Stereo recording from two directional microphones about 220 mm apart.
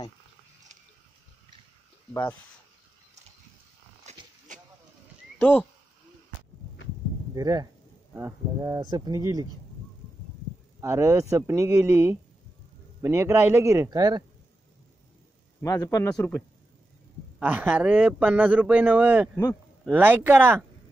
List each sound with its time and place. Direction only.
4.0 s a sound: 30° right (ahead or behind)
5.4 s speech: 5° left (ahead or behind)
7.3 s speech: 15° right (ahead or behind)
10.8 s speech: 10° right (ahead or behind)
15.6 s a man's voice: 15° left (ahead or behind)
17.4 s speech: 10° right (ahead or behind)